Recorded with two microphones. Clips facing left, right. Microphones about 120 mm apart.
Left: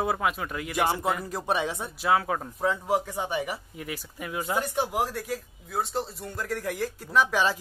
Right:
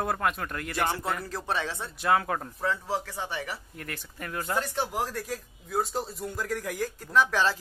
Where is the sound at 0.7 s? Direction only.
15° left (ahead or behind).